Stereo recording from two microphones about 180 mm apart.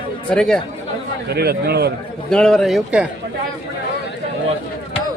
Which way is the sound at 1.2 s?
60° right (ahead or behind).